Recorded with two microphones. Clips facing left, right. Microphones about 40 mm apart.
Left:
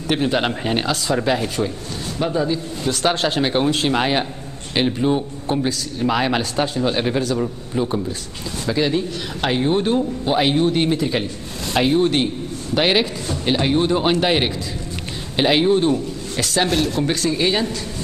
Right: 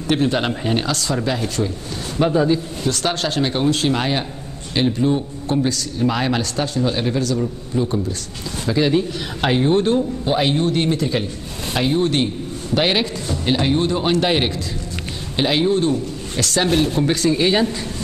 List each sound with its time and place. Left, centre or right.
0.1 s speech: centre
2.1 s a man's voice: centre
2.8 s speech: centre
8.6 s speech: centre
16.6 s speech: right
17.0 s speech: centre